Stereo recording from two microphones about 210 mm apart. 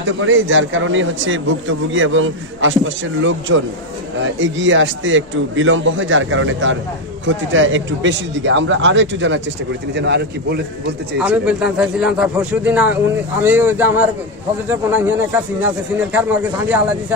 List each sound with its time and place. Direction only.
0.0 s a man's voice: 65° right (ahead or behind)
11.1 s a man's voice: 5° right (ahead or behind)